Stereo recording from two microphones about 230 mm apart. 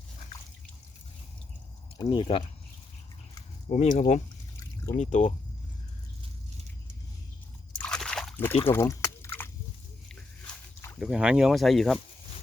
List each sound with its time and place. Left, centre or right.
2.0 s speech: left
3.7 s speech: left
7.8 s slosh: centre
8.7 s a sound: centre
11.0 s speech: centre